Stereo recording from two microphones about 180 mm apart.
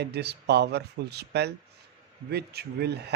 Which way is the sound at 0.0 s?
65° right (ahead or behind).